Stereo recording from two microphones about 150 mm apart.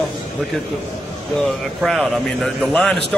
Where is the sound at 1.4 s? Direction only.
Centre (ahead or behind).